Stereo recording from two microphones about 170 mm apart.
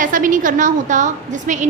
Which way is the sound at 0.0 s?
50° right (ahead or behind).